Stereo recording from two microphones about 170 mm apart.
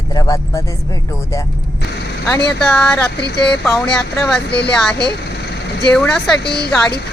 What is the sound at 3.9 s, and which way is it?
Speech, 5° left (ahead or behind).